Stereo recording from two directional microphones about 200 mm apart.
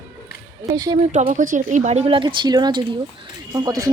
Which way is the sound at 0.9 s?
35° right (ahead or behind).